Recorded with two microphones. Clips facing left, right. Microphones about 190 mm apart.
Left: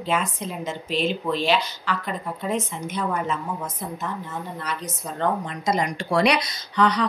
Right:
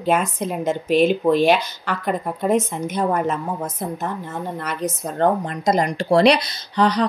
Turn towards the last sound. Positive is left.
turn(degrees=-35)  # may be behind; listen again after turning